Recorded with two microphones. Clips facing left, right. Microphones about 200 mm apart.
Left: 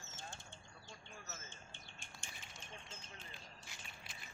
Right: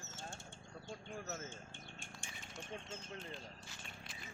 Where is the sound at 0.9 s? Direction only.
50° right (ahead or behind).